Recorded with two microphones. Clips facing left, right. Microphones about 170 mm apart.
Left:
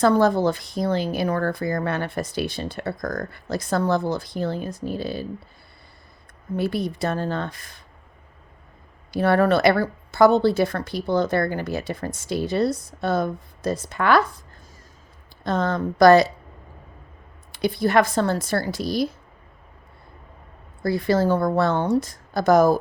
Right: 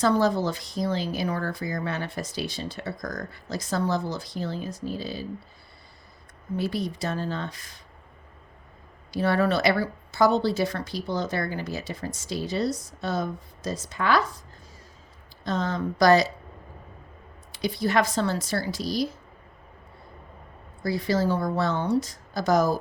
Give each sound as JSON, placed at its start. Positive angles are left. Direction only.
{"t": 0.0, "sound": "speech", "side_deg": 55}
{"t": 6.6, "sound": "speech", "side_deg": 55}
{"t": 9.1, "sound": "speech", "side_deg": 55}
{"t": 15.4, "sound": "speech", "side_deg": 55}
{"t": 17.5, "sound": "speech", "side_deg": 55}
{"t": 20.8, "sound": "speech", "side_deg": 55}